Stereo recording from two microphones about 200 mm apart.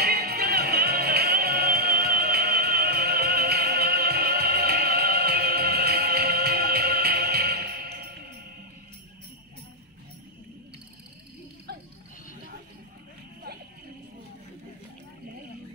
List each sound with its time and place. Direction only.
0.0 s music: 50° right (ahead or behind)